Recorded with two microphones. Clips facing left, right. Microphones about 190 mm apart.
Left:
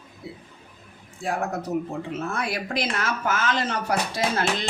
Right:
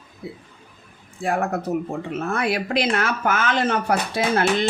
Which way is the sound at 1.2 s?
60° right (ahead or behind).